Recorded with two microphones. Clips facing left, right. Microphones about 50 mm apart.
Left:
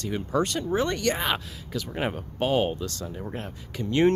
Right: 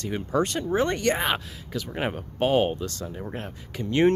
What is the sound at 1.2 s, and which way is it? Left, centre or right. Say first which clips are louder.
Speech: right 1 dB; centre.